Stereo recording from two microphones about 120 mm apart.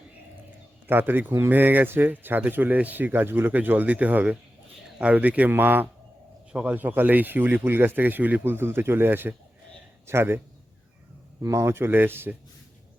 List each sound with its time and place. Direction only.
0.9 s a man's voice: 15° right (ahead or behind)